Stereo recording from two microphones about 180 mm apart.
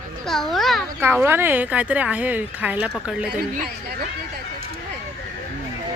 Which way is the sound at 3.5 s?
50° right (ahead or behind).